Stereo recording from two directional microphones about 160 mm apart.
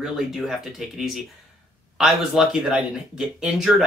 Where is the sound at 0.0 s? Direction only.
5° right (ahead or behind).